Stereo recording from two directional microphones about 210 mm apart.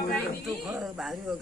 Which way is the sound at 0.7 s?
Centre (ahead or behind).